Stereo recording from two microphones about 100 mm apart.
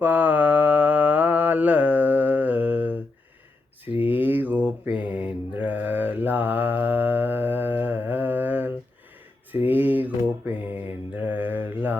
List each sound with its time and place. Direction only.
0.0 s mantra: 20° right (ahead or behind)
9.6 s a sound: 15° right (ahead or behind)
10.8 s mantra: 15° right (ahead or behind)